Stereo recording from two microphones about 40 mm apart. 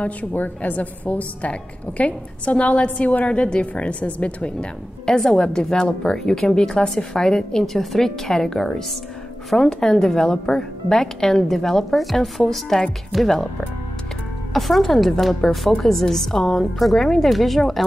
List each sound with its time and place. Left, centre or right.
0.0 s a woman's voice: left
5.0 s a woman's voice: centre
5.3 s a woman's voice: left
6.1 s a woman's voice: centre
14.5 s a woman's voice: centre